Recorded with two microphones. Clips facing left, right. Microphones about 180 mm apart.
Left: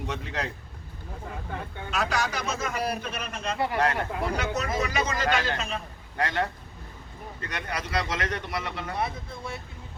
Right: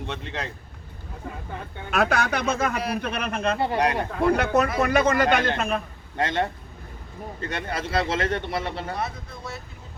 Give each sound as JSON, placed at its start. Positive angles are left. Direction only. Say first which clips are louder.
{"t": 0.1, "sound": "speech", "louder": "left 1 dB", "side_deg": 0}
{"t": 1.9, "sound": "a man's voice", "louder": "right 6 dB", "side_deg": -60}
{"t": 3.8, "sound": "speech", "louder": "right 3 dB", "side_deg": -20}
{"t": 4.3, "sound": "a man's voice", "louder": "right 8 dB", "side_deg": -55}
{"t": 6.1, "sound": "speech", "louder": "right 3 dB", "side_deg": -25}